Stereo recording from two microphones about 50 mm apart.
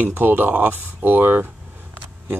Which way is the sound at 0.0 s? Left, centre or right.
Right.